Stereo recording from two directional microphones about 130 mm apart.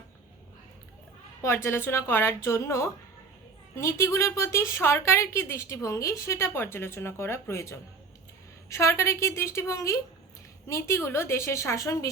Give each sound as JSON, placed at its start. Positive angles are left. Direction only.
{"t": 1.4, "sound": "speech", "side_deg": 20}